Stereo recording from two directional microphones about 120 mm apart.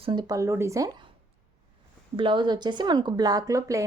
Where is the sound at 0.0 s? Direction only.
40° right (ahead or behind).